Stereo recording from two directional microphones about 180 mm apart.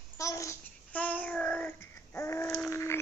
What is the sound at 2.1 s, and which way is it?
Babbling, 15° left (ahead or behind).